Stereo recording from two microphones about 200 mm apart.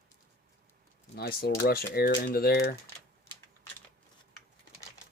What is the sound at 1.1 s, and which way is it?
Speech, 50° left (ahead or behind).